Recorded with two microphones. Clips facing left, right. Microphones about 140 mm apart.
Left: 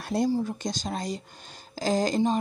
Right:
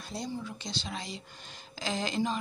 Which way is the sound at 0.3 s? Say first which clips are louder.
Left 10 dB; 45° left (ahead or behind).